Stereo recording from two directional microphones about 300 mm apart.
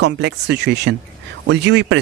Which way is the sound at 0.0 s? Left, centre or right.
Right.